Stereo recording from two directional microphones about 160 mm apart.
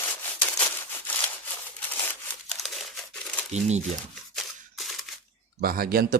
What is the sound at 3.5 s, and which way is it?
Speech, 45° right (ahead or behind).